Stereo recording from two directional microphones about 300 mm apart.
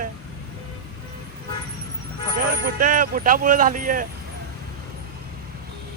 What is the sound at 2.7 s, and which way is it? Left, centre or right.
Speech, right.